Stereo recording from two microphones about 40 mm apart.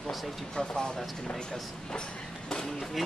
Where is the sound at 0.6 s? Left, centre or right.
Centre.